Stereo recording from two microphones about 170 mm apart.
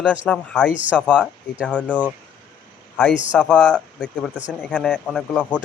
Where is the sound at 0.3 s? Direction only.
5° left (ahead or behind).